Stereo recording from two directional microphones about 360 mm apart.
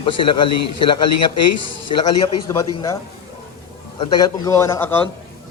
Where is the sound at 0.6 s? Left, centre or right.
Left.